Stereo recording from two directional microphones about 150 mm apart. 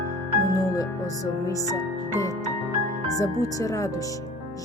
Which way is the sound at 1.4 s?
20° left (ahead or behind).